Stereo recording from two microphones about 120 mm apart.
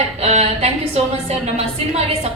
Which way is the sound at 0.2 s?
65° right (ahead or behind).